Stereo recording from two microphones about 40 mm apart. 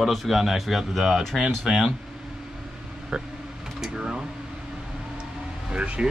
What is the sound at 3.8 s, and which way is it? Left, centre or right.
Speech, centre.